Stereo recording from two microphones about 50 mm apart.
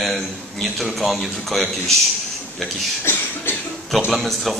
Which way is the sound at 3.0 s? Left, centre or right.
Left.